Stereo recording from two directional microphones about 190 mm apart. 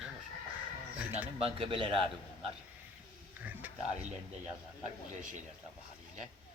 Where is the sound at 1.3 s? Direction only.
30° right (ahead or behind).